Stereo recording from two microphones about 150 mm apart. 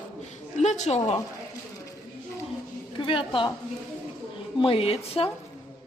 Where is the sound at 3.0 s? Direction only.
35° left (ahead or behind).